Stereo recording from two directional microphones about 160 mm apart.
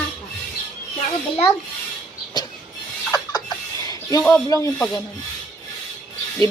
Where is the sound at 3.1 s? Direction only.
25° left (ahead or behind).